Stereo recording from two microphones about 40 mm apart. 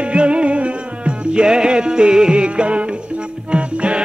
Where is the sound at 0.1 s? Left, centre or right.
Right.